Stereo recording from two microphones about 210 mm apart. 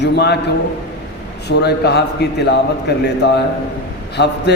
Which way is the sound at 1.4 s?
50° left (ahead or behind).